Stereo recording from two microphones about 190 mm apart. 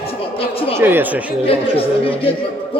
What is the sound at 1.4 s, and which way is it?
Speech, 30° left (ahead or behind).